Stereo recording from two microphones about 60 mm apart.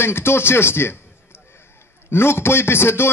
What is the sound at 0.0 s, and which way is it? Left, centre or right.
Speech, left.